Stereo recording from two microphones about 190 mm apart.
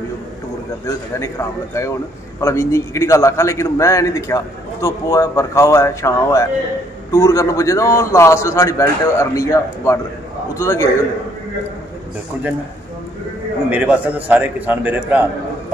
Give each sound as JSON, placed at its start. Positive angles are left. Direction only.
{"t": 0.8, "sound": "a man's voice", "side_deg": 15}
{"t": 13.7, "sound": "a man's voice", "side_deg": -10}